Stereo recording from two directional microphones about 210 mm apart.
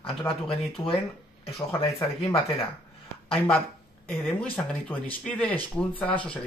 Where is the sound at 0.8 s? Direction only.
15° left (ahead or behind).